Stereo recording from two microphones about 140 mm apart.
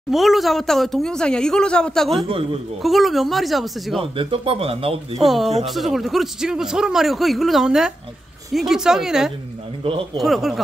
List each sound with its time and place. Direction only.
0.1 s a man's voice: centre (ahead or behind)
4.0 s a man's voice: 40° right (ahead or behind)
5.2 s a man's voice: centre (ahead or behind)